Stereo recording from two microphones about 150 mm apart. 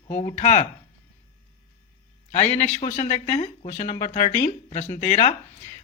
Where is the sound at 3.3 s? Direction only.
40° left (ahead or behind).